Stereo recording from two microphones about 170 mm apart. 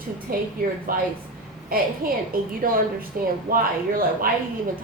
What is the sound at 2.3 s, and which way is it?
Speech, 55° right (ahead or behind).